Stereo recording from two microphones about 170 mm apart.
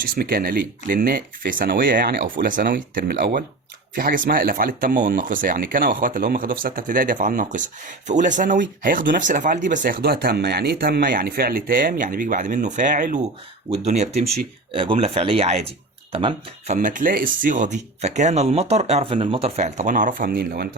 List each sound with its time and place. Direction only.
0.0 s speech: 60° right (ahead or behind)
3.9 s speech: 55° right (ahead or behind)
13.7 s speech: 40° right (ahead or behind)
16.7 s speech: 50° right (ahead or behind)